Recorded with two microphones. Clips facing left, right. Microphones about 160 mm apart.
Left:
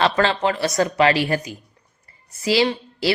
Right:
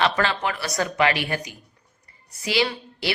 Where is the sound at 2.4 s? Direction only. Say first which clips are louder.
Left 5 dB; 30° left (ahead or behind).